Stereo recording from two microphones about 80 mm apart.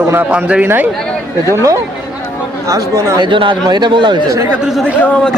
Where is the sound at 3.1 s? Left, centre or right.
Right.